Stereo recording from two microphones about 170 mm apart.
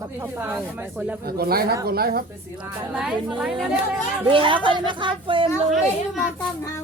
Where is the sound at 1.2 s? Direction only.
65° right (ahead or behind).